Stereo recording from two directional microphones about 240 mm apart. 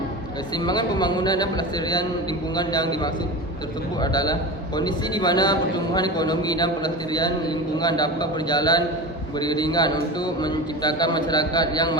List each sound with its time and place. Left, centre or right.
0.5 s a man's voice: centre